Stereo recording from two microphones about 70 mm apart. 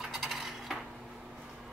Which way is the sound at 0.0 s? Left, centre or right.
Centre.